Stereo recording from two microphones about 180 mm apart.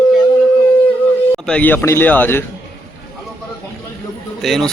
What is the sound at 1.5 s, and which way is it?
Speech, 10° left (ahead or behind).